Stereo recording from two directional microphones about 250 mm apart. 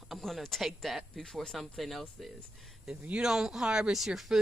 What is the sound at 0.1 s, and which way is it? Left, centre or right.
Speech, centre.